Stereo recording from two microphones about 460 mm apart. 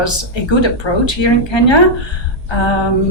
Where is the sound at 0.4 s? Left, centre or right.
Left.